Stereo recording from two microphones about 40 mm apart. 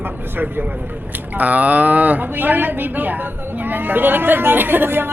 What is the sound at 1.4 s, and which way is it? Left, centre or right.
Speech, right.